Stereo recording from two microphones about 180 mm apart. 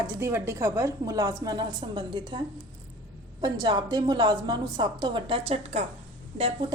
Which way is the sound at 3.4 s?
25° right (ahead or behind).